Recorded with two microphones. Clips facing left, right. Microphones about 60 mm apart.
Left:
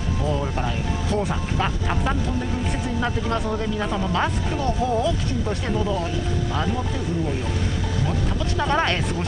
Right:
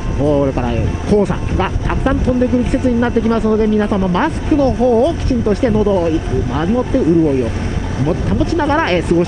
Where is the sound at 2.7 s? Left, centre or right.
Right.